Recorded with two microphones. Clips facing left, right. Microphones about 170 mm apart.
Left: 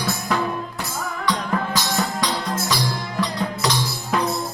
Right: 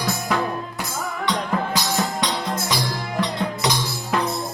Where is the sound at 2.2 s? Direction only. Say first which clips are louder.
Even; 25° right (ahead or behind).